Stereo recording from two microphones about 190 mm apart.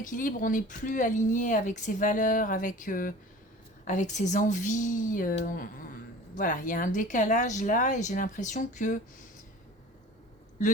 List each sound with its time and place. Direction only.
0.0 s speech: 45° left (ahead or behind)